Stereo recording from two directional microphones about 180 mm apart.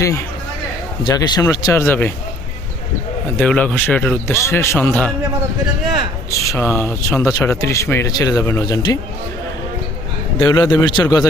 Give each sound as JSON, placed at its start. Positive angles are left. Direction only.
{"t": 0.0, "sound": "speech", "side_deg": 15}
{"t": 3.3, "sound": "speech", "side_deg": 5}
{"t": 6.4, "sound": "speech", "side_deg": 15}
{"t": 10.3, "sound": "speech", "side_deg": 25}